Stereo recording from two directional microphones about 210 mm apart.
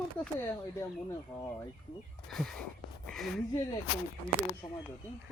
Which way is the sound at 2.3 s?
5° left (ahead or behind).